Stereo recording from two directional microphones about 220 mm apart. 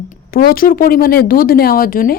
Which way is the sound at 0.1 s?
40° left (ahead or behind).